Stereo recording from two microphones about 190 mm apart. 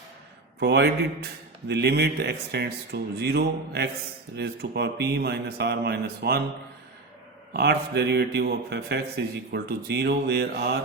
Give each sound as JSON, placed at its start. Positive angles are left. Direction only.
{"t": 0.6, "sound": "a man's voice", "side_deg": -60}
{"t": 7.5, "sound": "a man's voice", "side_deg": -60}